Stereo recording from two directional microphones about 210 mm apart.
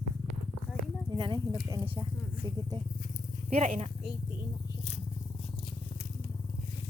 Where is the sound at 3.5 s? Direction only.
30° right (ahead or behind).